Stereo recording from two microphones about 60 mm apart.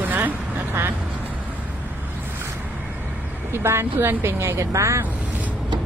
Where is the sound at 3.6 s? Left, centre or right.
Right.